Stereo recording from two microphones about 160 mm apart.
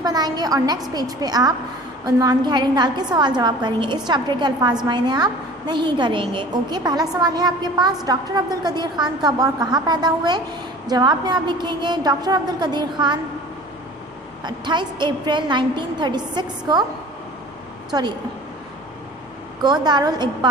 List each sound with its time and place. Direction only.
0.0 s a woman's voice: 25° right (ahead or behind)
14.4 s a woman's voice: 30° right (ahead or behind)
17.9 s a woman's voice: 25° right (ahead or behind)
19.6 s a woman's voice: 25° right (ahead or behind)